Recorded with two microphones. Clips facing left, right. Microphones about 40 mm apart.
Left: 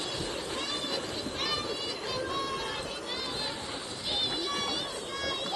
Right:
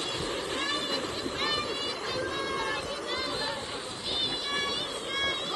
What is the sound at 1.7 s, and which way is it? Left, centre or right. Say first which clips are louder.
Music: right 2 dB; right.